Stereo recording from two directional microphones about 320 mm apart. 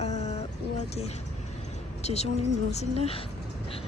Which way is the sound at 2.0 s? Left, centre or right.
Centre.